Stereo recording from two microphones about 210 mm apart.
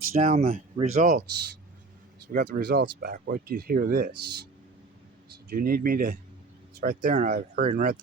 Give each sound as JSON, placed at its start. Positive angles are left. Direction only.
{"t": 0.1, "sound": "speech", "side_deg": -40}
{"t": 2.2, "sound": "speech", "side_deg": -40}
{"t": 5.5, "sound": "speech", "side_deg": -45}